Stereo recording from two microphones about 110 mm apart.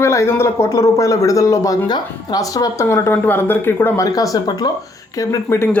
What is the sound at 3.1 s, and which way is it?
Speech, 15° left (ahead or behind).